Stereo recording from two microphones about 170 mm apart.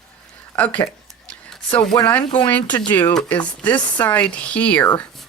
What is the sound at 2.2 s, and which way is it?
Speech, 30° left (ahead or behind).